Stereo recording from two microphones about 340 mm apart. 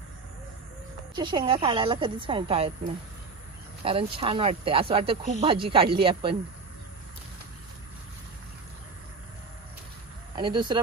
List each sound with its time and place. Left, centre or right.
1.1 s speech: centre
3.8 s speech: centre
10.3 s speech: centre